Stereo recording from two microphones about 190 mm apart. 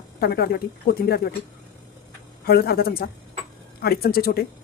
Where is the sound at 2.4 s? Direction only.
55° left (ahead or behind).